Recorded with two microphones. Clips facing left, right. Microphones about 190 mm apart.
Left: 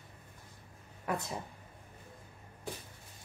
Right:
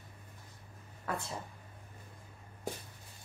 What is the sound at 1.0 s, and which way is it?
Speech, 15° left (ahead or behind).